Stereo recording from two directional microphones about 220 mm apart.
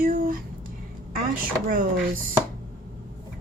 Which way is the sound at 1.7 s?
40° right (ahead or behind).